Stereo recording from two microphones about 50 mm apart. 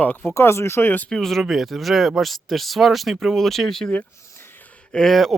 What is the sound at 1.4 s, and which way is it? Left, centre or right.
Speech, centre.